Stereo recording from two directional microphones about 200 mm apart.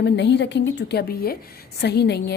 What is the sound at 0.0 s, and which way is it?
A woman's voice, 60° left (ahead or behind).